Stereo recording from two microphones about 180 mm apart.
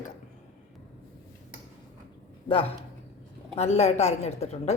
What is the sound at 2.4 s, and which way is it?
A woman's voice, 30° left (ahead or behind).